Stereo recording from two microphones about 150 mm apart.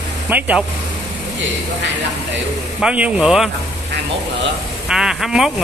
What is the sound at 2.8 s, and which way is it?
Speech, 5° right (ahead or behind).